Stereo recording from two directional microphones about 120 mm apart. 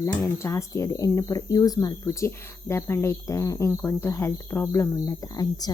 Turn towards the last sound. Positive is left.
turn(degrees=30)  # may be behind; listen again after turning